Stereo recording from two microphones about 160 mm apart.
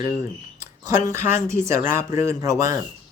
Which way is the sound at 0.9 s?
20° right (ahead or behind).